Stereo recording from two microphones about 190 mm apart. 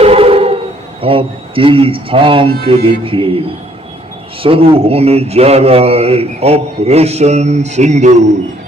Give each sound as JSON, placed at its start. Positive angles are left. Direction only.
{"t": 0.0, "sound": "a sound", "side_deg": -30}
{"t": 1.0, "sound": "a man's voice", "side_deg": -30}
{"t": 4.4, "sound": "a man's voice", "side_deg": -30}